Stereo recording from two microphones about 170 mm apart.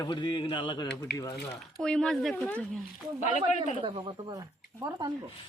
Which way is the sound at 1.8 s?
5° left (ahead or behind).